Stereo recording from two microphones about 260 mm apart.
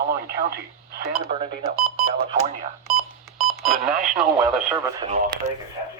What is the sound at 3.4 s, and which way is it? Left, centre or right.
Radio, centre.